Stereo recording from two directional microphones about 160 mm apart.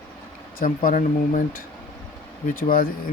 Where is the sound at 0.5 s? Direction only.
60° left (ahead or behind).